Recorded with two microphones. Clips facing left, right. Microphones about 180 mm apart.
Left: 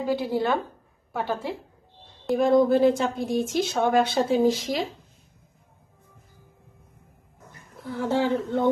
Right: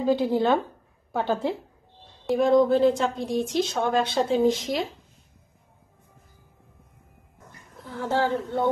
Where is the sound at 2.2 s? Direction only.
Centre (ahead or behind).